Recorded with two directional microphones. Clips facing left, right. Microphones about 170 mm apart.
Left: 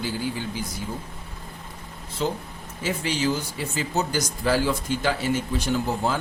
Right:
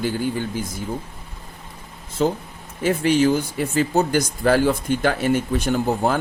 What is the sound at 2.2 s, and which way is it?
Speech, 45° right (ahead or behind).